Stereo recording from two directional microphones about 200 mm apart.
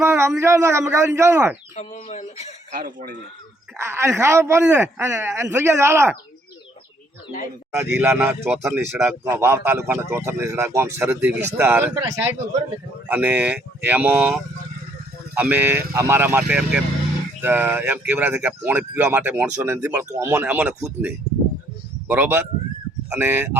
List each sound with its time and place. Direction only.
0.0 s a man's voice: 10° right (ahead or behind)
1.7 s speech: 35° left (ahead or behind)
2.7 s speech: 45° right (ahead or behind)
3.8 s a man's voice: 15° right (ahead or behind)
7.9 s a man's voice: 10° right (ahead or behind)